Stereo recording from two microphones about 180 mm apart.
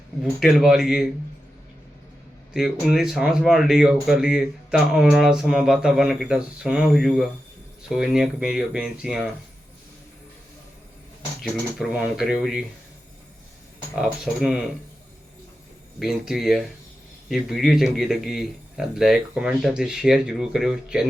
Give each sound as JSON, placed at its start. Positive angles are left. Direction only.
{"t": 0.3, "sound": "speech", "side_deg": 0}
{"t": 2.5, "sound": "speech", "side_deg": 0}
{"t": 11.8, "sound": "speech", "side_deg": -5}
{"t": 14.0, "sound": "speech", "side_deg": -5}
{"t": 16.0, "sound": "speech", "side_deg": 0}